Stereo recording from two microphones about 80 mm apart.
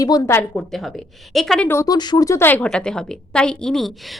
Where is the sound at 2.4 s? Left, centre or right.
Left.